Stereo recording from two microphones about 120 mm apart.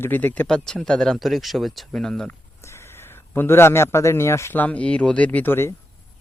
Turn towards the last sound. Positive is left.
turn(degrees=20)  # may be behind; listen again after turning